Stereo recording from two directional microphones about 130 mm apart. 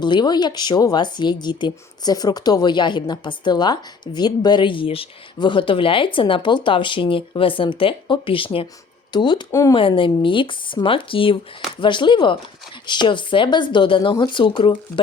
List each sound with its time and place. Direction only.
0.0 s speech: 35° left (ahead or behind)
9.5 s speech: 25° left (ahead or behind)
9.7 s speech: 40° left (ahead or behind)